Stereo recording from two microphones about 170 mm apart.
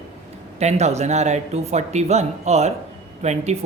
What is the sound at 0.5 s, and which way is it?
Speech, 40° right (ahead or behind).